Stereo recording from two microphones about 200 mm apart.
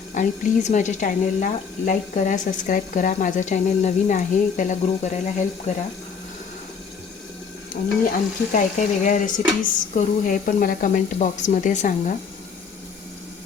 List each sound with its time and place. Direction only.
0.1 s speech: 40° left (ahead or behind)
8.5 s speech: 40° left (ahead or behind)